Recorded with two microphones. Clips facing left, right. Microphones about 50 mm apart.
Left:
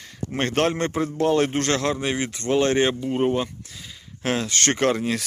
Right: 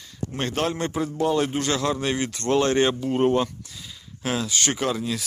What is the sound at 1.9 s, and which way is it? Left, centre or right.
Speech, left.